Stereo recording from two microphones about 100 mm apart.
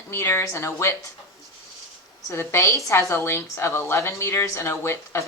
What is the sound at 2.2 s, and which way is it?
A woman's voice, 30° left (ahead or behind).